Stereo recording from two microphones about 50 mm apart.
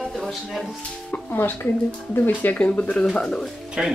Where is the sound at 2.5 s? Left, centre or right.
Left.